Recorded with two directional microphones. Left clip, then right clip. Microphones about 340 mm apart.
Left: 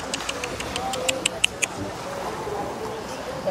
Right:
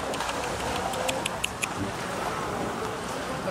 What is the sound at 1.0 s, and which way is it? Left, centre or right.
Clock, left.